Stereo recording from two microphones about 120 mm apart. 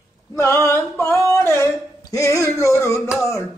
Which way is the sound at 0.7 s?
20° left (ahead or behind).